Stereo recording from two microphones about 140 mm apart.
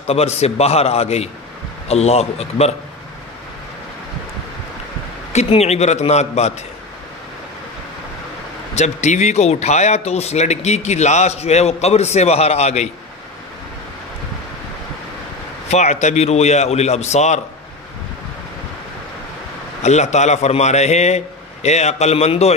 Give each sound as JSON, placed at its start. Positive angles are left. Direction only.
{"t": 0.0, "sound": "speech", "side_deg": 50}
{"t": 5.3, "sound": "speech", "side_deg": 50}
{"t": 8.7, "sound": "speech", "side_deg": 55}
{"t": 15.7, "sound": "speech", "side_deg": 55}
{"t": 19.8, "sound": "speech", "side_deg": 55}